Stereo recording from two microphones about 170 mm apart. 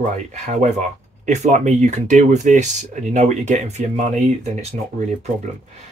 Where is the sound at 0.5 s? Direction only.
45° right (ahead or behind).